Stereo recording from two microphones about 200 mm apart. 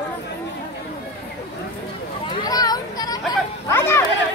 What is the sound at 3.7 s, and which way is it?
Chatter, 15° left (ahead or behind).